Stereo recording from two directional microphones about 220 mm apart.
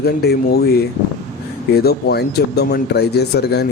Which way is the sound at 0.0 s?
45° left (ahead or behind).